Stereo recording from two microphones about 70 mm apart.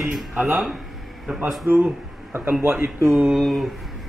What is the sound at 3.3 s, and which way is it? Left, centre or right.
Speech, centre.